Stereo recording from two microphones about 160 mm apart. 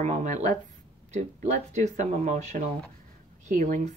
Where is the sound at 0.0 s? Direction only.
50° right (ahead or behind).